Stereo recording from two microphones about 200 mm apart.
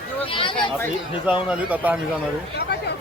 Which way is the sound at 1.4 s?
5° right (ahead or behind).